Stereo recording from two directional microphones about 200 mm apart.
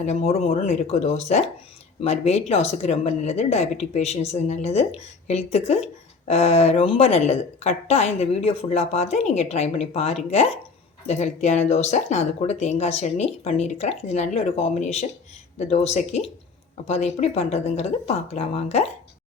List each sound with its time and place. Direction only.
0.0 s speech: 35° left (ahead or behind)